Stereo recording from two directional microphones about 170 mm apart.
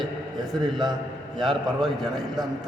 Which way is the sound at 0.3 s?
25° right (ahead or behind).